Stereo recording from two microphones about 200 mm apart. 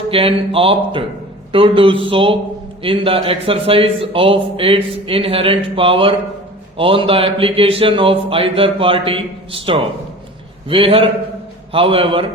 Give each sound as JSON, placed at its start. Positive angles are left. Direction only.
{"t": 0.1, "sound": "a man's voice", "side_deg": -25}